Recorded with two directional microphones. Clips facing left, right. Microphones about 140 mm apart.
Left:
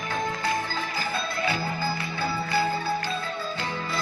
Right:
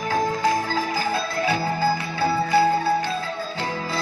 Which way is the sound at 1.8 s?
70° right (ahead or behind).